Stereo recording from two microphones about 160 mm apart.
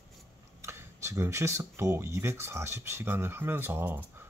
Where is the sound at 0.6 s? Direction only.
15° right (ahead or behind).